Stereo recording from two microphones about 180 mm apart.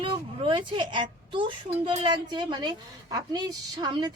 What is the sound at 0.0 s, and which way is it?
A woman's voice, 25° right (ahead or behind).